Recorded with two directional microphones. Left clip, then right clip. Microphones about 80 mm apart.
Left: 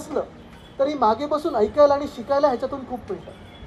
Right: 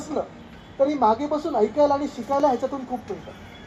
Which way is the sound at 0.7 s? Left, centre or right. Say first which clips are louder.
Even; left.